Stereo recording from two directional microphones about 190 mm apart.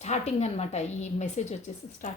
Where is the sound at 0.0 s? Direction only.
35° left (ahead or behind).